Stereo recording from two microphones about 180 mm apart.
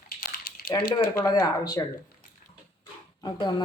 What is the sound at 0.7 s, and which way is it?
Speech, 25° left (ahead or behind).